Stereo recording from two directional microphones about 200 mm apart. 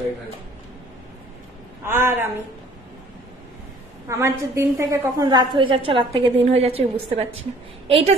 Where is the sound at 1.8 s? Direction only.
10° right (ahead or behind).